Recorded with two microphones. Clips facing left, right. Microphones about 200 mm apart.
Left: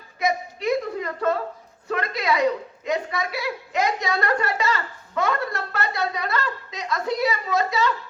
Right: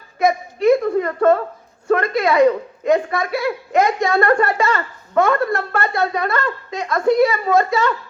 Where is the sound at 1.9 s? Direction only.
50° right (ahead or behind).